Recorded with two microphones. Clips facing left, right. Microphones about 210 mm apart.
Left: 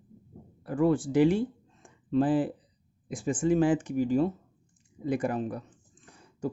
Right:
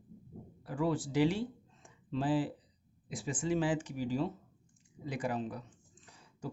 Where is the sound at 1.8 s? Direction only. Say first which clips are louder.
Left 8 dB; 50° left (ahead or behind).